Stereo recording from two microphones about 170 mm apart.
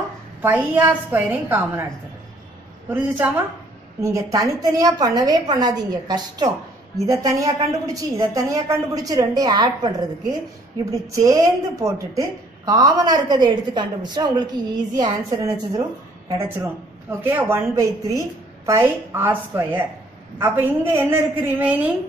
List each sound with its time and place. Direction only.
0.4 s a woman's voice: 10° right (ahead or behind)
2.9 s a woman's voice: 10° right (ahead or behind)
4.0 s a woman's voice: 20° right (ahead or behind)